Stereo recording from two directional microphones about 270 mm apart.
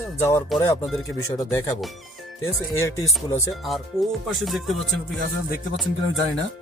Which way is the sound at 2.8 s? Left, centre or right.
Centre.